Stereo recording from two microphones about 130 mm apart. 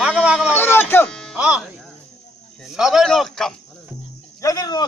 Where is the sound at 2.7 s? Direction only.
5° right (ahead or behind).